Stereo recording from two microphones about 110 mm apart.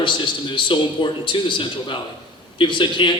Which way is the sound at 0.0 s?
45° left (ahead or behind).